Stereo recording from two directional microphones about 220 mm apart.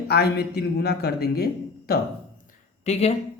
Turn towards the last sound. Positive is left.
turn(degrees=30)  # may be behind; listen again after turning